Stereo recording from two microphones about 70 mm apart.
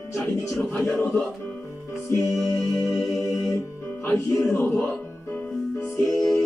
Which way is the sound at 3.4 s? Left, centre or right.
Left.